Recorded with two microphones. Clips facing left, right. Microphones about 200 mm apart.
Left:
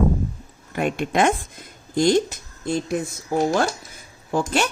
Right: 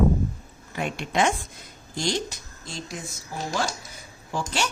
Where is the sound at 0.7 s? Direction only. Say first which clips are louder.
Left 5 dB; 55° left (ahead or behind).